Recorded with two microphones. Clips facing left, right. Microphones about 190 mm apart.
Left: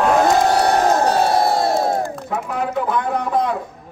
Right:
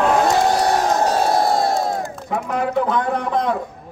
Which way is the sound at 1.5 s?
60° left (ahead or behind).